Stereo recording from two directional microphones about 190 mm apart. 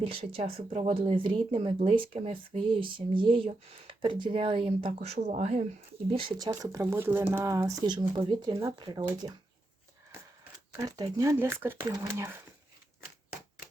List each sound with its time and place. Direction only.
0.1 s speech: 30° right (ahead or behind)
6.1 s speech: 25° right (ahead or behind)
10.7 s speech: 15° right (ahead or behind)